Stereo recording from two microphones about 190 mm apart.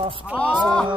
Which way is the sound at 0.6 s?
5° left (ahead or behind).